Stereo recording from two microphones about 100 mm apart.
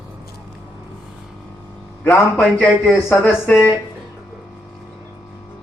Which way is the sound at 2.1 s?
15° left (ahead or behind).